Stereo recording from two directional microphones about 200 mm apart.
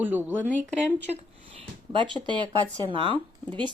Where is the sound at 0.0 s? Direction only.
10° right (ahead or behind).